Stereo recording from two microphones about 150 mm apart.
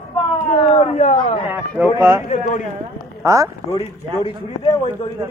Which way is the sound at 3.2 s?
20° right (ahead or behind).